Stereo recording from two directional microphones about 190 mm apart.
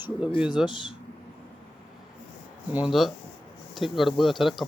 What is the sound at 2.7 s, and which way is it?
Speech, 5° right (ahead or behind).